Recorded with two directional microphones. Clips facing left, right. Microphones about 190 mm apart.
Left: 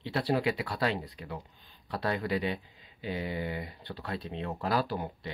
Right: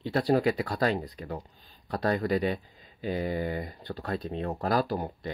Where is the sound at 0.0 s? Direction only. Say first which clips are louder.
Right 5 dB; 45° right (ahead or behind).